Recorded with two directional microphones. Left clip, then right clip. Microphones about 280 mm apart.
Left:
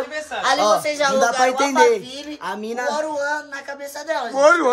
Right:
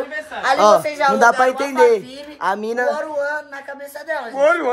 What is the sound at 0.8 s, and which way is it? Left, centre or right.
Speech, centre.